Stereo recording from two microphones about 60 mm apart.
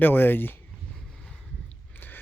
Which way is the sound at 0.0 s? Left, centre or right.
Left.